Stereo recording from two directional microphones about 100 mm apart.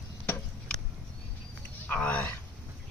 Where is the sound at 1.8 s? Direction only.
15° left (ahead or behind).